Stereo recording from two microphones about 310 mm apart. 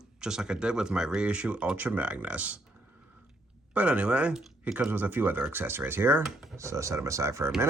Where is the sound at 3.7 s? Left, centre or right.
Centre.